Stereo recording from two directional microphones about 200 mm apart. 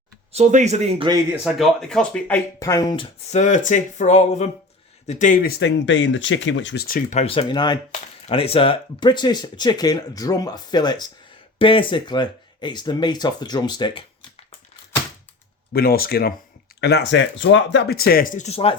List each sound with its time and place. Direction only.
0.3 s speech: 35° right (ahead or behind)
1.5 s speech: centre (ahead or behind); by 6.8 s 65° left (ahead or behind)
6.8 s speech: 40° left (ahead or behind); by 14.3 s 20° left (ahead or behind)
15.7 s speech: 50° left (ahead or behind); by 18.8 s 30° left (ahead or behind)